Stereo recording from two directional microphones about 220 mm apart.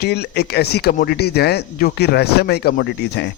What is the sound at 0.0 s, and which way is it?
A man's voice, 45° left (ahead or behind).